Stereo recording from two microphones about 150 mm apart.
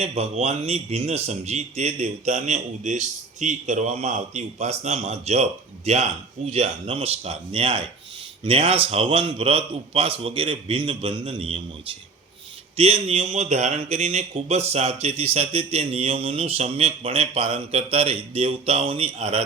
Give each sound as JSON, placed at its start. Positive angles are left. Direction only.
{"t": 0.0, "sound": "speech", "side_deg": -45}